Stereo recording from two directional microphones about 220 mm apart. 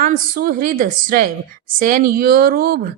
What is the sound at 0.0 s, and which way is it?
A woman's voice, 40° right (ahead or behind).